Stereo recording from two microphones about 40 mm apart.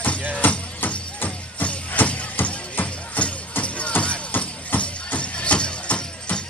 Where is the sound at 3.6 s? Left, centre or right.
Left.